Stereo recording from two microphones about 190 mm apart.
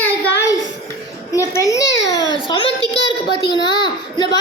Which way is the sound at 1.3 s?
15° left (ahead or behind).